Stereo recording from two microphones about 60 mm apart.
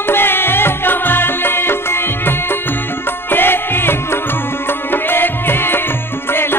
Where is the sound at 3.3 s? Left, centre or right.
Left.